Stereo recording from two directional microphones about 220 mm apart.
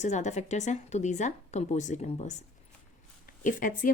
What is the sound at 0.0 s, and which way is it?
A woman's voice, 30° left (ahead or behind).